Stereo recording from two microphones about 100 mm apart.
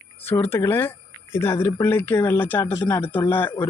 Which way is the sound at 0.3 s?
25° left (ahead or behind).